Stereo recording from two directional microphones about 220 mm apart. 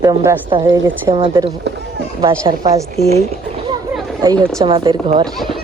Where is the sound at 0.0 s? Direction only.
15° right (ahead or behind).